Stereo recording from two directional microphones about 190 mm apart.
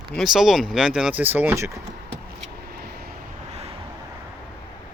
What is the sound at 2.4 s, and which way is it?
Vehicle, 55° right (ahead or behind).